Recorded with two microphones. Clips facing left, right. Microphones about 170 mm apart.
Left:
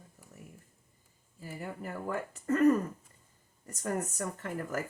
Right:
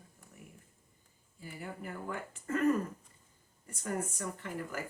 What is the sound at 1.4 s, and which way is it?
Speech, 40° left (ahead or behind).